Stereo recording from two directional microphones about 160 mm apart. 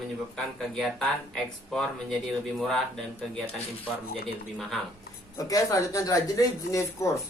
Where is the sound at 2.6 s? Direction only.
Centre (ahead or behind).